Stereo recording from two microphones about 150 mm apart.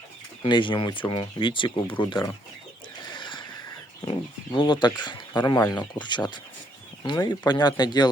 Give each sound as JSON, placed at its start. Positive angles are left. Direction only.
{"t": 0.4, "sound": "speech", "side_deg": 30}
{"t": 3.1, "sound": "neigh", "side_deg": 30}
{"t": 4.5, "sound": "speech", "side_deg": 30}